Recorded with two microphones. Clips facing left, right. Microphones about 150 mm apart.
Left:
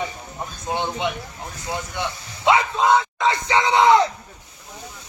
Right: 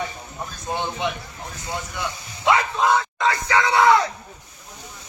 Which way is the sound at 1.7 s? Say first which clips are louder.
Left 2 dB; 20° left (ahead or behind).